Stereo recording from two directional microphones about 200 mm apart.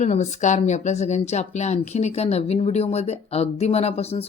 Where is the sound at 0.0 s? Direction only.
35° left (ahead or behind).